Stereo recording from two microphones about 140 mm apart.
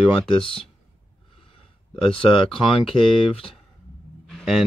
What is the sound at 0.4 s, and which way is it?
Speech, 40° left (ahead or behind).